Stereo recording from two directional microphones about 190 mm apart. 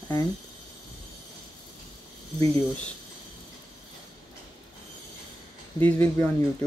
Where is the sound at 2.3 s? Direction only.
15° left (ahead or behind).